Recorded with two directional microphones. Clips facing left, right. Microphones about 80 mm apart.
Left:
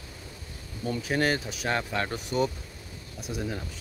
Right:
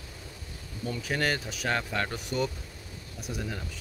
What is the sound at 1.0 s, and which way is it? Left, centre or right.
Speech, centre.